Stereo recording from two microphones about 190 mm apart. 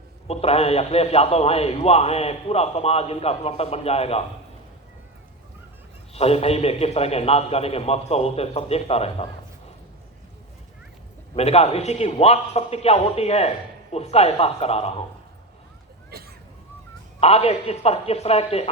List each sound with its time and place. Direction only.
0.3 s a man's voice: 35° left (ahead or behind)
6.1 s a man's voice: 30° left (ahead or behind)
11.3 s a man's voice: 35° left (ahead or behind)
16.0 s a sound: 55° right (ahead or behind)
17.2 s a man's voice: 30° left (ahead or behind)